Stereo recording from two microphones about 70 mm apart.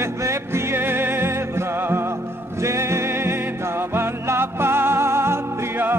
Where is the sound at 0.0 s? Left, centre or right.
Right.